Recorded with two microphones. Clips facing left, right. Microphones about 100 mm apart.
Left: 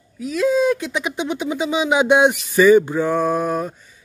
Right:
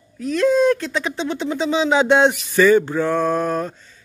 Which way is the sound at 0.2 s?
5° left (ahead or behind).